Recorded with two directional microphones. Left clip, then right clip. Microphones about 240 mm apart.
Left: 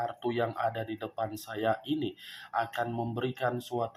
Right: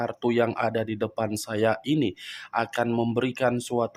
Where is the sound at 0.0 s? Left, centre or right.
Right.